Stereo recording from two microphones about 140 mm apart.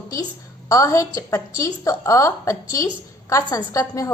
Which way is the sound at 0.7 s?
20° left (ahead or behind).